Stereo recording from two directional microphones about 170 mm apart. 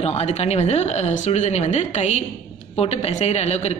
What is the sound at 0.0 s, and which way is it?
A man's voice, 40° left (ahead or behind).